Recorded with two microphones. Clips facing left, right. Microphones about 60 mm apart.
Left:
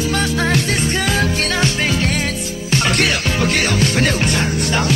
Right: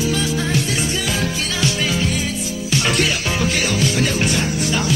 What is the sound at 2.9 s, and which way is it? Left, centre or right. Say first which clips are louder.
Music: left 2 dB; left.